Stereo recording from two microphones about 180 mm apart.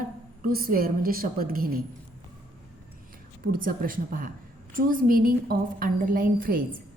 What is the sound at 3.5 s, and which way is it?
A woman's voice, 50° right (ahead or behind).